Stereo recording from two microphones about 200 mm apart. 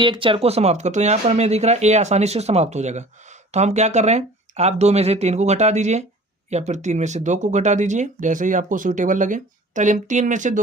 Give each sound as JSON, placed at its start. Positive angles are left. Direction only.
{"t": 0.0, "sound": "speech", "side_deg": -25}